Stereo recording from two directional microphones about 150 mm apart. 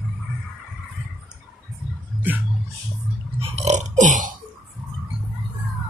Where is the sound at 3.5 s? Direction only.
50° right (ahead or behind).